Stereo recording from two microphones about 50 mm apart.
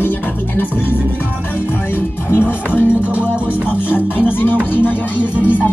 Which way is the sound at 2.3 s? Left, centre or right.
Left.